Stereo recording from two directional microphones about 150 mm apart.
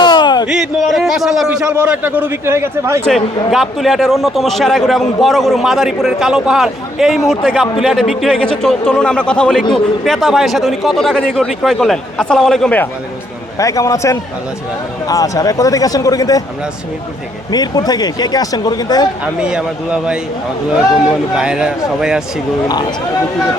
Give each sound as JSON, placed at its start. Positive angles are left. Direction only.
{"t": 0.0, "sound": "a sound", "side_deg": 30}
{"t": 0.4, "sound": "a man's voice", "side_deg": 0}
{"t": 3.5, "sound": "a man's voice", "side_deg": 0}
{"t": 13.6, "sound": "speech", "side_deg": 20}
{"t": 17.5, "sound": "speech", "side_deg": 25}
{"t": 19.2, "sound": "a man's voice", "side_deg": -5}
{"t": 21.3, "sound": "a man's voice", "side_deg": -5}